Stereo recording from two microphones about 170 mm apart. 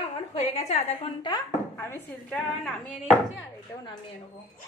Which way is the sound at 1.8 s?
15° left (ahead or behind).